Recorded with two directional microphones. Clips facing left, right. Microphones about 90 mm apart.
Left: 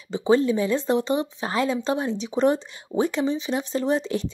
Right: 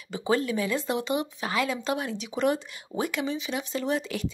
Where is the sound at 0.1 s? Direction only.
25° left (ahead or behind).